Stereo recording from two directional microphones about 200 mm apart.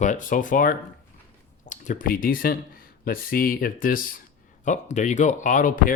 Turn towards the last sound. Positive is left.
turn(degrees=40)  # may be behind; listen again after turning